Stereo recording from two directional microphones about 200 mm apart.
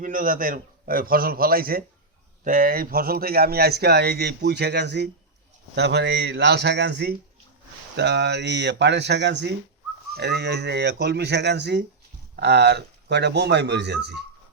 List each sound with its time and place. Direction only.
0.0 s speech: 45° right (ahead or behind)